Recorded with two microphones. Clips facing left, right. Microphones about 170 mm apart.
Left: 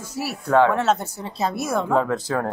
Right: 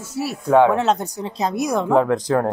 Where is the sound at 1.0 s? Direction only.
15° right (ahead or behind).